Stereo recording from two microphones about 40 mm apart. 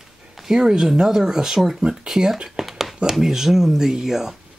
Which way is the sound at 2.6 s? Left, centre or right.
Centre.